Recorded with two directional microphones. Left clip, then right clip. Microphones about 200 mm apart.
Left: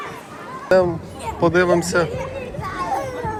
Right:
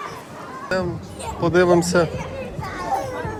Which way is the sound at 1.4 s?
15° right (ahead or behind).